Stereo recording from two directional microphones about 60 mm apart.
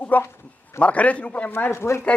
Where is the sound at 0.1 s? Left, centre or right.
Left.